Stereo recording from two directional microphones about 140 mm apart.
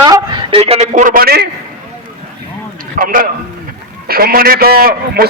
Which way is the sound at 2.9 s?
85° right.